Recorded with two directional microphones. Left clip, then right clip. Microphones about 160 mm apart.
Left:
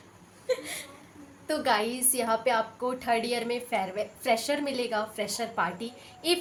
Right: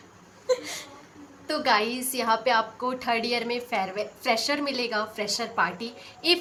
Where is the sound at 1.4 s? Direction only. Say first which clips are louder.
Right 3 dB; 30° left (ahead or behind).